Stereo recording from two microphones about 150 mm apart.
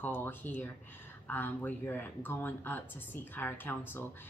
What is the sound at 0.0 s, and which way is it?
Speech, 15° left (ahead or behind).